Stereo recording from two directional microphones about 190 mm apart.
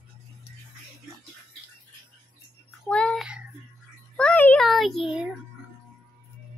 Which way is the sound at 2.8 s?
5° left (ahead or behind).